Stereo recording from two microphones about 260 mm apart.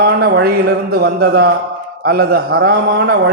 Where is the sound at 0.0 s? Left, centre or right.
Right.